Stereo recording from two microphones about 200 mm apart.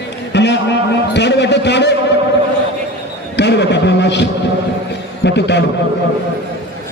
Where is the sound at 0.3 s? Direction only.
60° left (ahead or behind).